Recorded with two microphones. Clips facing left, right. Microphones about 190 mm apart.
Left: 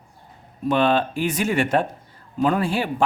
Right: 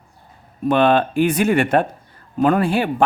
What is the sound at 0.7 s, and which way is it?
A man's voice, 60° right (ahead or behind).